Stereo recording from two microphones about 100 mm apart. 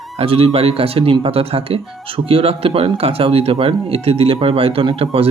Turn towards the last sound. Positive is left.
turn(degrees=-70)  # may be behind; listen again after turning